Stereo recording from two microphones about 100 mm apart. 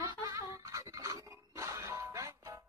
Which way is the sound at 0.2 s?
35° right (ahead or behind).